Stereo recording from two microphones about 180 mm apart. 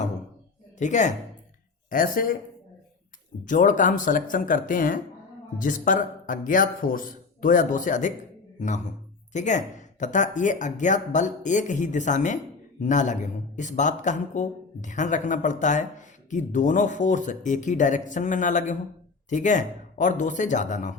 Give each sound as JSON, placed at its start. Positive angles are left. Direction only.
{"t": 0.8, "sound": "speech", "side_deg": 45}
{"t": 3.4, "sound": "speech", "side_deg": 45}